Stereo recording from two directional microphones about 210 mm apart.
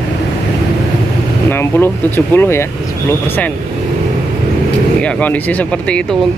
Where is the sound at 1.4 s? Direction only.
10° left (ahead or behind).